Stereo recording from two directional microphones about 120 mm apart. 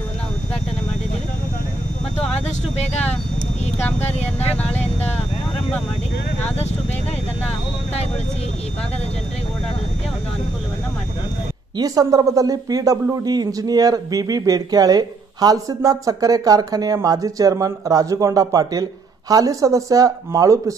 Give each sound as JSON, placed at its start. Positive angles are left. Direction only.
{"t": 4.0, "sound": "speech", "side_deg": 60}
{"t": 11.8, "sound": "speech", "side_deg": -30}